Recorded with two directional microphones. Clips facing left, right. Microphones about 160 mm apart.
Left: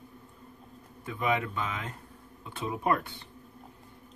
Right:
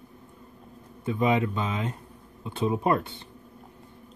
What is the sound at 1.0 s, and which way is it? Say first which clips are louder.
Speech: right 6 dB; 25° right (ahead or behind).